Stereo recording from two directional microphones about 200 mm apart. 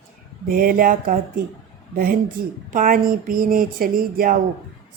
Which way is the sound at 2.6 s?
45° right (ahead or behind).